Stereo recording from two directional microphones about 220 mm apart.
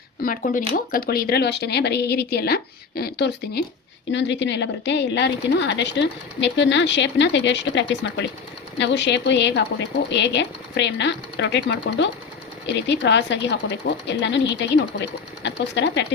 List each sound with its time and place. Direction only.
0.2 s a woman's voice: 40° left (ahead or behind)